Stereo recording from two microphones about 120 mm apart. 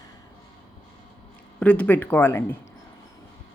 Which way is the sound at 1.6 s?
10° left (ahead or behind).